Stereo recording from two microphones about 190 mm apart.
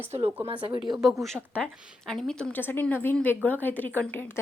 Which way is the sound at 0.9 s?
Centre (ahead or behind).